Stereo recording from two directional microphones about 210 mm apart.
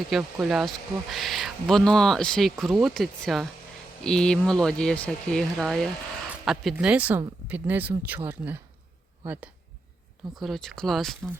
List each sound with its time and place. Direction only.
0.1 s speech: centre (ahead or behind)